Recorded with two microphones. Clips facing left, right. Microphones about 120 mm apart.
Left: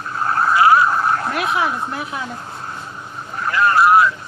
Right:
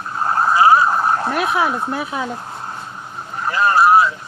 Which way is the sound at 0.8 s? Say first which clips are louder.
Right 1 dB; 20° right (ahead or behind).